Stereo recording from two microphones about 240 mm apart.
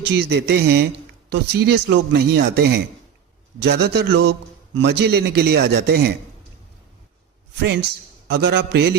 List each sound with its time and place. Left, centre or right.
0.2 s a man's voice: right
7.9 s a man's voice: right